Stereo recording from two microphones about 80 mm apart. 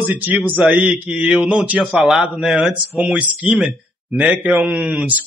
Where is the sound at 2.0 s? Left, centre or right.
Centre.